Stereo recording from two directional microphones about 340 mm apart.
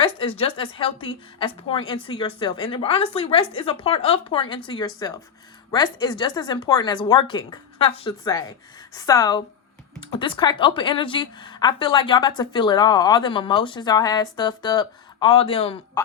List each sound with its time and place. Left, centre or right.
0.0 s speech: centre